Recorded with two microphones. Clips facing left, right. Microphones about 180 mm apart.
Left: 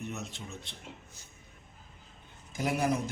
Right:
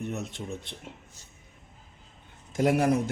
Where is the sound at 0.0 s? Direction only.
55° right (ahead or behind).